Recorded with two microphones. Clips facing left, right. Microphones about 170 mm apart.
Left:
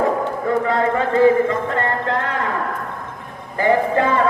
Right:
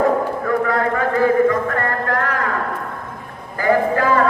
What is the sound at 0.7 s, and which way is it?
Speech, 25° left (ahead or behind).